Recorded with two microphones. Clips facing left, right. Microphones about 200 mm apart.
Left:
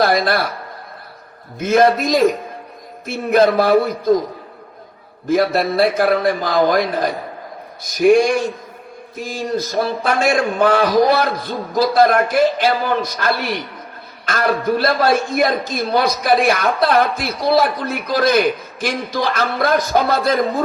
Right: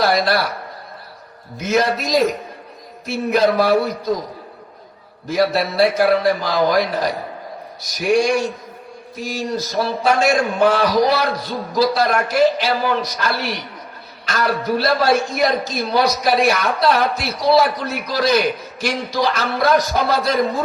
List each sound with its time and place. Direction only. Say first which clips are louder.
0.0 s a man's voice: left 1 dB; 55° left (ahead or behind)
1.5 s a man's voice: left 5 dB; 50° left (ahead or behind)
5.3 s a man's voice: left 2 dB; 50° left (ahead or behind)